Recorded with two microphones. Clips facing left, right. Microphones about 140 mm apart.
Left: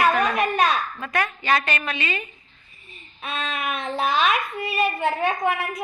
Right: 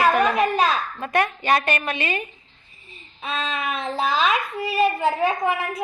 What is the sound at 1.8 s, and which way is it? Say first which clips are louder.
Speech: right 2 dB; 45° right (ahead or behind).